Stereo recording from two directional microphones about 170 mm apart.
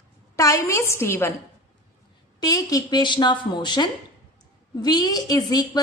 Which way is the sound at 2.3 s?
20° left (ahead or behind).